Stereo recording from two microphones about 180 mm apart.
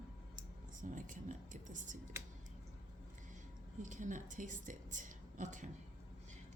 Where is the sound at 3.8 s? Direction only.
45° right (ahead or behind).